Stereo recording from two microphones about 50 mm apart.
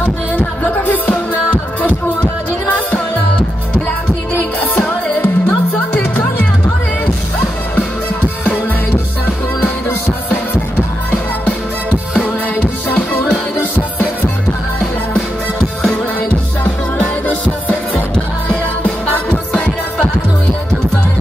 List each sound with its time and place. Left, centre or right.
0.0 s music: left
4.3 s music: left
8.9 s music: left
12.2 s music: left
19.3 s music: left